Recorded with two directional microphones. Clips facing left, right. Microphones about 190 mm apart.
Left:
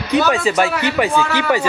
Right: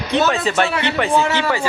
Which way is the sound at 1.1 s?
25° right (ahead or behind).